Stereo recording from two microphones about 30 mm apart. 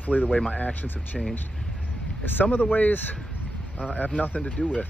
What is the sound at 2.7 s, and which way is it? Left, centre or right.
Speech, left.